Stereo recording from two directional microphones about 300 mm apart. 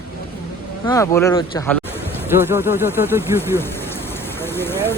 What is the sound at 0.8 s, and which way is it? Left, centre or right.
Speech, centre.